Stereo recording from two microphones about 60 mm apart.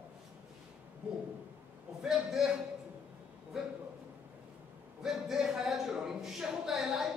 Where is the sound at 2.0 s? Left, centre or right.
Centre.